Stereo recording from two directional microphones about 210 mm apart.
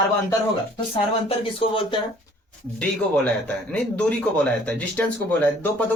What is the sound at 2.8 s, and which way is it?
Speech, 5° left (ahead or behind).